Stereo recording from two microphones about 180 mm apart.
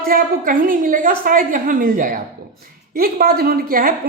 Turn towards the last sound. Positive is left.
turn(degrees=-55)  # may be behind; listen again after turning